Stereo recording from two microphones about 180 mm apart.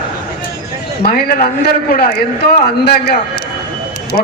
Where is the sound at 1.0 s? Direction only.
60° left (ahead or behind).